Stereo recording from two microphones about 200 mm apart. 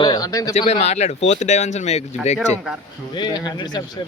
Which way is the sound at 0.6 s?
35° left (ahead or behind).